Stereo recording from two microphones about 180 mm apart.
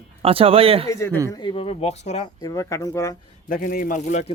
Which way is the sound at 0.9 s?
15° left (ahead or behind).